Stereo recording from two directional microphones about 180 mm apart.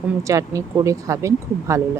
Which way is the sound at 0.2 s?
15° right (ahead or behind).